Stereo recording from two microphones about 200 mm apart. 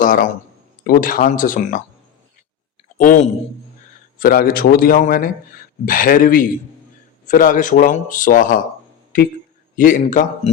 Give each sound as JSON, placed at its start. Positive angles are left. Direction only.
{"t": 0.0, "sound": "a man's voice", "side_deg": 40}
{"t": 3.0, "sound": "a man's voice", "side_deg": 40}
{"t": 9.7, "sound": "speech", "side_deg": 40}